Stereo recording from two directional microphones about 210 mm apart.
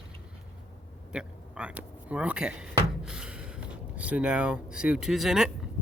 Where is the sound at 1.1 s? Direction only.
5° right (ahead or behind).